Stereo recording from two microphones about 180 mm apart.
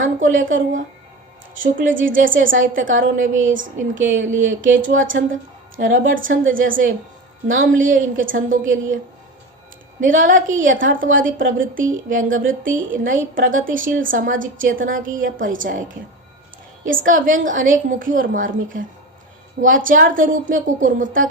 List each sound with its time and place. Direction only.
0.0 s a woman's voice: 45° right (ahead or behind)
1.8 s speech: 90° right
2.1 s a woman's voice: 50° right (ahead or behind)
10.0 s a woman's voice: 50° right (ahead or behind)
16.8 s a woman's voice: 50° right (ahead or behind)